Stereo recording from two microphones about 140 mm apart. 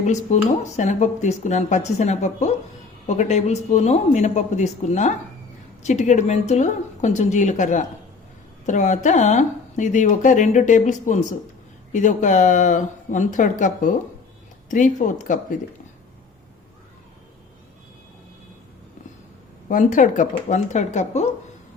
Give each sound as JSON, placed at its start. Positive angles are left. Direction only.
{"t": 0.0, "sound": "speech", "side_deg": 55}
{"t": 19.6, "sound": "speech", "side_deg": 65}